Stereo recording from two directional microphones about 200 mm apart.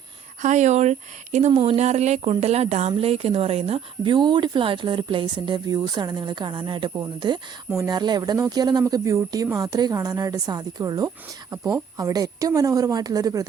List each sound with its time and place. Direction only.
0.4 s speech: 35° right (ahead or behind); by 13.4 s 20° right (ahead or behind)